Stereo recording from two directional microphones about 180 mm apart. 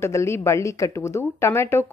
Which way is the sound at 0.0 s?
15° left (ahead or behind).